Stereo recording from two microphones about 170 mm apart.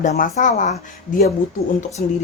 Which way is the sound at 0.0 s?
45° left (ahead or behind).